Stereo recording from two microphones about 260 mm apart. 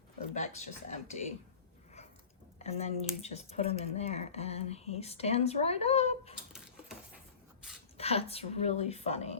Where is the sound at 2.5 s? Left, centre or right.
Left.